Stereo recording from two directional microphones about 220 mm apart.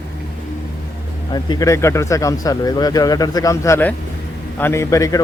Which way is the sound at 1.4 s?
15° left (ahead or behind).